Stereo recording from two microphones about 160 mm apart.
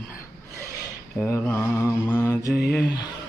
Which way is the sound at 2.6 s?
80° left.